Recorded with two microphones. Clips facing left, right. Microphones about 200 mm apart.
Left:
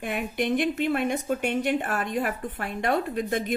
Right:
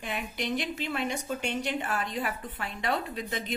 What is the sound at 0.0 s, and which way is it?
A woman's voice, 55° left (ahead or behind).